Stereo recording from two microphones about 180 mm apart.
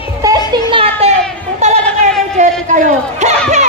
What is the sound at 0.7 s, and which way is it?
Children playing, 30° right (ahead or behind).